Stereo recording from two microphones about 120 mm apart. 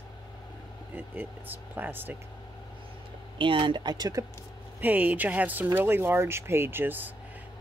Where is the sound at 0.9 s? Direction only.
15° right (ahead or behind).